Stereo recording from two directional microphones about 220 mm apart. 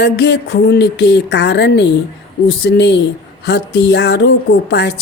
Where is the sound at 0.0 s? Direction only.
50° left (ahead or behind).